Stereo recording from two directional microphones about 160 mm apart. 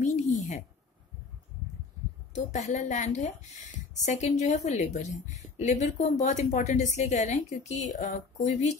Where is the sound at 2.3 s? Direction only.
45° left (ahead or behind).